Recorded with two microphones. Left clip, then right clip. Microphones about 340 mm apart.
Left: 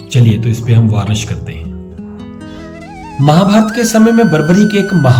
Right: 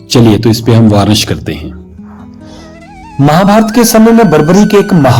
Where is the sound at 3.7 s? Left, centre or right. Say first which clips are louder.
Right 5 dB; centre.